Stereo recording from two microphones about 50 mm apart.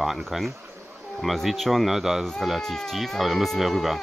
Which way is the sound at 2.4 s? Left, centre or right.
Centre.